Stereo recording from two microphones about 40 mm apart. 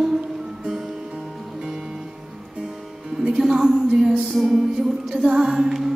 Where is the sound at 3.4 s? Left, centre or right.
Centre.